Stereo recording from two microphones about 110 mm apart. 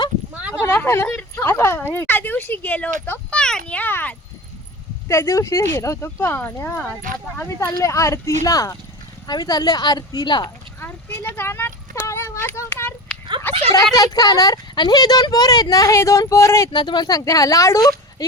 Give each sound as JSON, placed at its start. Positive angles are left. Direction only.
{"t": 0.6, "sound": "a sound", "side_deg": 20}
{"t": 1.9, "sound": "speech", "side_deg": 20}
{"t": 5.0, "sound": "speech", "side_deg": 25}
{"t": 10.8, "sound": "speech", "side_deg": 25}
{"t": 13.9, "sound": "speech", "side_deg": 35}
{"t": 16.7, "sound": "speech", "side_deg": 40}